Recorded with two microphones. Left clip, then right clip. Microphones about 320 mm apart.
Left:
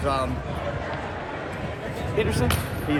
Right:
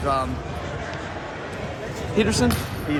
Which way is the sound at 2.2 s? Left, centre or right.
Right.